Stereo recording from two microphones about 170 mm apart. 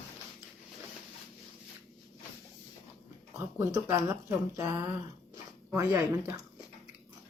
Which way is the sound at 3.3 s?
20° right (ahead or behind).